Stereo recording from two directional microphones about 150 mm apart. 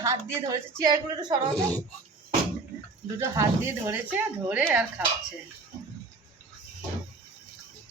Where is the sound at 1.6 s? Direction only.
5° left (ahead or behind).